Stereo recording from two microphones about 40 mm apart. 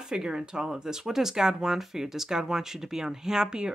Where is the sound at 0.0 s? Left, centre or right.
Centre.